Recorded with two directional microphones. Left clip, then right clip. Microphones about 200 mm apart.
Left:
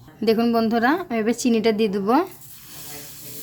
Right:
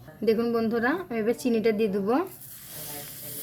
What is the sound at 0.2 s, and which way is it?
A woman's voice, 35° left (ahead or behind).